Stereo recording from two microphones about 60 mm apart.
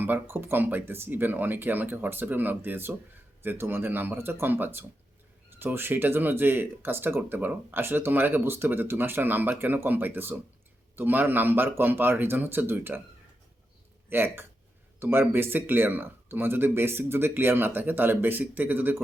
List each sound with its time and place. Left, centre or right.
0.0 s speech: right
14.1 s speech: right